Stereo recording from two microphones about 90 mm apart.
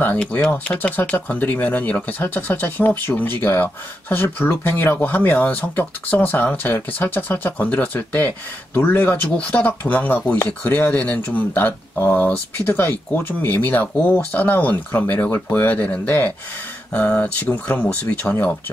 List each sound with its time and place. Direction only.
0.2 s speech: 15° left (ahead or behind)